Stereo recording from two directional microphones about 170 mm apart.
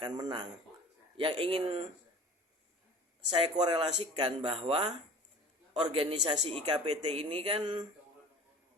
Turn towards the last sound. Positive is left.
turn(degrees=-30)  # may be behind; listen again after turning